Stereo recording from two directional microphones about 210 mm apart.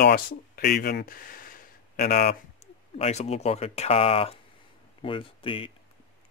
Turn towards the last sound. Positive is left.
turn(degrees=25)  # may be behind; listen again after turning